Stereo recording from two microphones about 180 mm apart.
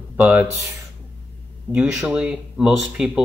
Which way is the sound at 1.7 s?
5° right (ahead or behind).